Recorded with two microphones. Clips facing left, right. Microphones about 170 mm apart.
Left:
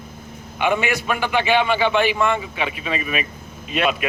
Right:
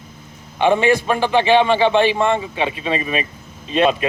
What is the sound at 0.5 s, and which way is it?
Speech, 30° right (ahead or behind).